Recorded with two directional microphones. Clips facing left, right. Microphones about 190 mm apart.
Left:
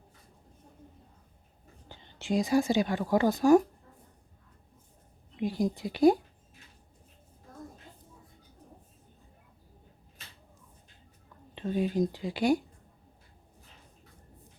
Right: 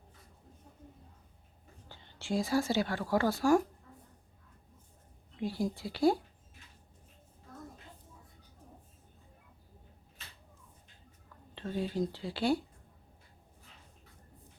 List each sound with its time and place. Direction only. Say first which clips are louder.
1.9 s a woman's voice: left 4 dB; 20° left (ahead or behind)
5.4 s speech: left 4 dB; 15° left (ahead or behind)
11.5 s speech: left 5 dB; 15° left (ahead or behind)